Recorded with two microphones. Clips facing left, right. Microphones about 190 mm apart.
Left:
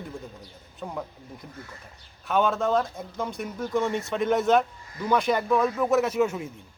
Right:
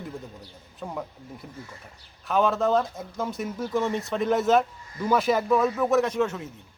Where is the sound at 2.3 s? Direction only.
Centre (ahead or behind).